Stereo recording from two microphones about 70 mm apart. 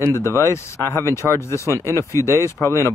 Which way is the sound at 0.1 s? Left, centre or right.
Left.